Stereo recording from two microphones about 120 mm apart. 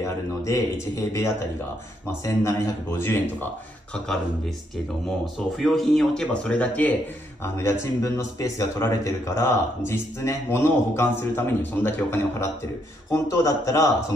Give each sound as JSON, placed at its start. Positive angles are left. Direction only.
{"t": 0.0, "sound": "speech", "side_deg": 25}
{"t": 5.2, "sound": "speech", "side_deg": 0}